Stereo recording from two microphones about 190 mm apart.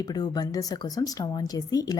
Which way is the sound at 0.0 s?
20° left (ahead or behind).